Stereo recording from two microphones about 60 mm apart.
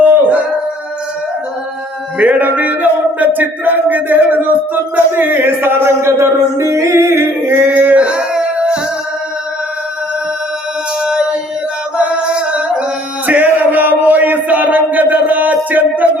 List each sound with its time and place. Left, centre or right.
0.0 s a sound: right
2.1 s music: right
7.7 s male singing: right
8.0 s music: centre
11.9 s music: centre
13.2 s a sound: right